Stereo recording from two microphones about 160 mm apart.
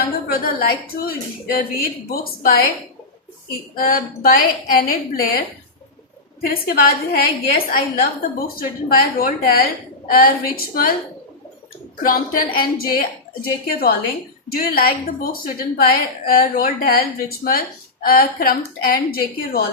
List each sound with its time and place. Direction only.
0.3 s a woman's voice: 70° left (ahead or behind)
3.8 s a woman's voice: 65° left (ahead or behind)
6.4 s a woman's voice: 70° left (ahead or behind)
12.0 s a woman's voice: 60° left (ahead or behind)
18.0 s a woman's voice: 65° left (ahead or behind)